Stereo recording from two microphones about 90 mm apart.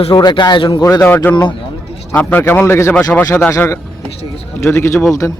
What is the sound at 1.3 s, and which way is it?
Speech, 20° left (ahead or behind).